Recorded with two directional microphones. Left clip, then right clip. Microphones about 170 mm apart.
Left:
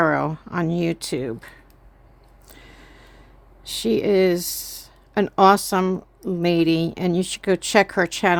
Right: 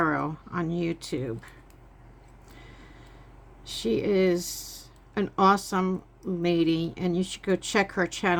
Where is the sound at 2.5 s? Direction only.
60° left (ahead or behind).